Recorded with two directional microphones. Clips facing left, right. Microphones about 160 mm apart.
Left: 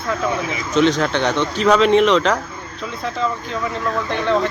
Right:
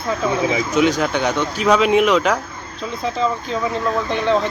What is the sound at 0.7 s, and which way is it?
Speech, 5° right (ahead or behind).